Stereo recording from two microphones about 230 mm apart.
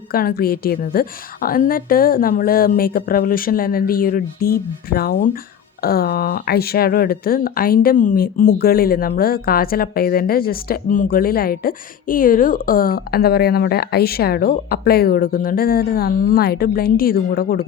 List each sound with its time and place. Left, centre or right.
0.1 s speech: left